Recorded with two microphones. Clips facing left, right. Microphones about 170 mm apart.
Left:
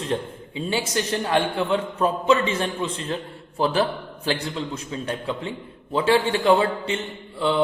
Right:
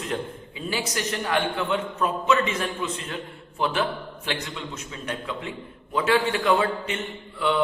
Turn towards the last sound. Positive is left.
turn(degrees=30)  # may be behind; listen again after turning